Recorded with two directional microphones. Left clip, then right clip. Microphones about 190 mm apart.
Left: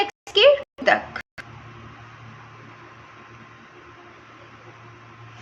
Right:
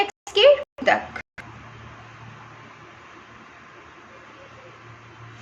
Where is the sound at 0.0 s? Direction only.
10° left (ahead or behind).